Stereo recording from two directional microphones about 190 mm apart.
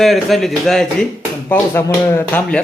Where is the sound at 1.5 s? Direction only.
10° left (ahead or behind).